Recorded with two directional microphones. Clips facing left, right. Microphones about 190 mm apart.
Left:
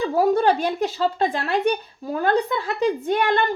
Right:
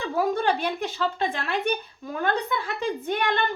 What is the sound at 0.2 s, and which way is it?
Speech, 40° left (ahead or behind).